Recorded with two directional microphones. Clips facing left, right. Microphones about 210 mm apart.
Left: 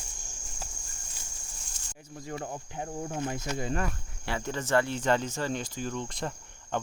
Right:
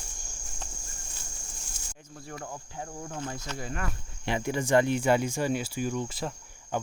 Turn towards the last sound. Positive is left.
turn(degrees=-10)  # may be behind; listen again after turning